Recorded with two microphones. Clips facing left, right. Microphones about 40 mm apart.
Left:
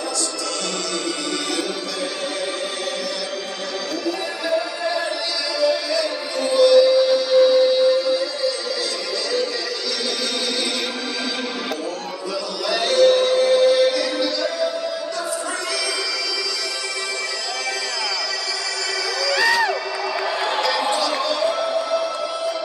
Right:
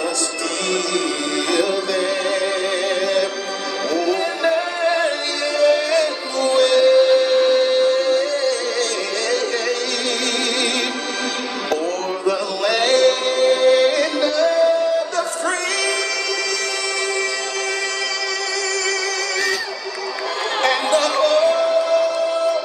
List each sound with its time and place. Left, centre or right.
4.0 s music: right
12.3 s singing: right
20.6 s music: right